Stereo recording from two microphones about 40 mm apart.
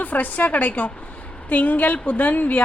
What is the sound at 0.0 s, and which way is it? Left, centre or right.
A woman's voice, left.